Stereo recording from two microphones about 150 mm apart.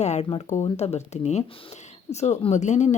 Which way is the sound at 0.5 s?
45° left (ahead or behind).